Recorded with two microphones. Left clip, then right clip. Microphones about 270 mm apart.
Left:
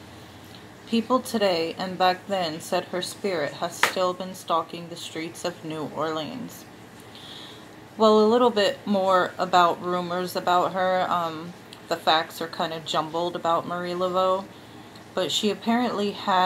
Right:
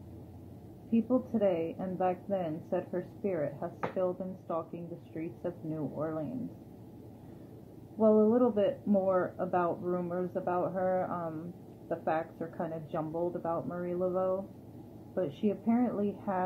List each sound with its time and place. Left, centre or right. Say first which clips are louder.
1.0 s a woman's voice: left 7 dB; centre
8.1 s a woman's voice: left 7 dB; centre